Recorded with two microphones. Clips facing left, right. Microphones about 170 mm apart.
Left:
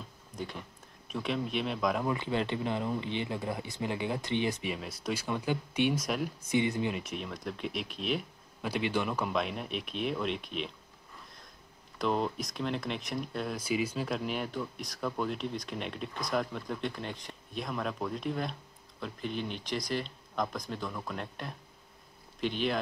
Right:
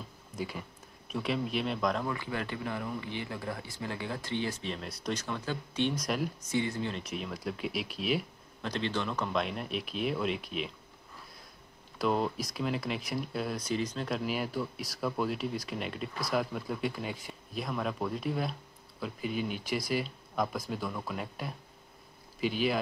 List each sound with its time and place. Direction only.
0.4 s speech: 5° right (ahead or behind)
2.0 s speech: 20° left (ahead or behind)
5.9 s speech: centre (ahead or behind)
6.5 s speech: 15° left (ahead or behind)
7.0 s speech: centre (ahead or behind)
8.6 s speech: 10° left (ahead or behind)
12.0 s speech: 5° right (ahead or behind)